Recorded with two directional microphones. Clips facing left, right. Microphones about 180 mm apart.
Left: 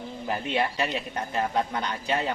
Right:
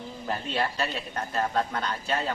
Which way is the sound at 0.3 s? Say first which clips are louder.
Left 2 dB; 15° left (ahead or behind).